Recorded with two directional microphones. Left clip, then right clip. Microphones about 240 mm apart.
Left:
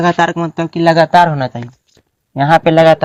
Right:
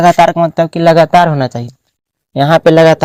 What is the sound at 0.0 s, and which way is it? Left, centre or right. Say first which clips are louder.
Speech: right 6 dB; right.